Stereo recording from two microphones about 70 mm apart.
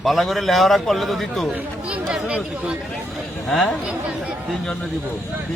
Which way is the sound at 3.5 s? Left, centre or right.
Centre.